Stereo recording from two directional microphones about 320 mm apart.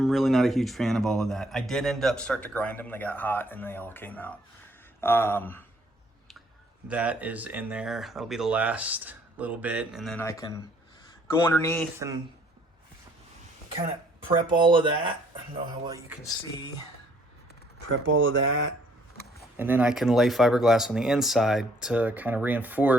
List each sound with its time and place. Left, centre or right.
0.0 s a man's voice: centre
6.8 s a man's voice: centre
14.3 s speech: centre
17.8 s speech: right
19.4 s a man's voice: centre